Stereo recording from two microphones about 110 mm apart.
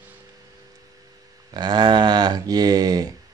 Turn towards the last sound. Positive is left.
turn(degrees=-35)  # may be behind; listen again after turning